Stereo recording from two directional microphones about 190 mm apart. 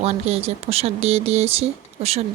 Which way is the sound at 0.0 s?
35° right (ahead or behind).